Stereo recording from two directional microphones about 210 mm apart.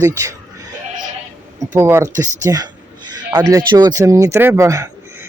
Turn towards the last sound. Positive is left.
turn(degrees=-15)  # may be behind; listen again after turning